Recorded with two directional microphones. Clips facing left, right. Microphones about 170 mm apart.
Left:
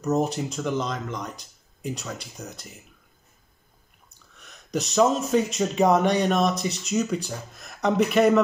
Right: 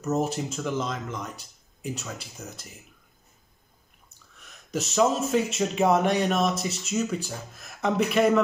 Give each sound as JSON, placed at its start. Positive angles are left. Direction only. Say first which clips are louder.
{"t": 0.1, "sound": "speech", "louder": "left 2 dB", "side_deg": -5}
{"t": 4.4, "sound": "speech", "louder": "left 2 dB", "side_deg": 0}